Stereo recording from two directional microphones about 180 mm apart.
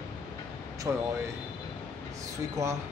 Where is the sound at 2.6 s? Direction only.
15° right (ahead or behind).